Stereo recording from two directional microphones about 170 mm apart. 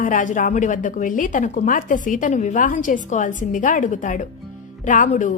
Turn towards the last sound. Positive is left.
turn(degrees=45)  # may be behind; listen again after turning